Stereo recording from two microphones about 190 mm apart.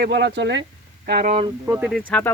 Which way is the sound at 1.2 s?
40° right (ahead or behind).